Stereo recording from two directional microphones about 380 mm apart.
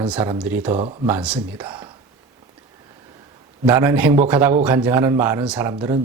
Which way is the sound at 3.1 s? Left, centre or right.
Centre.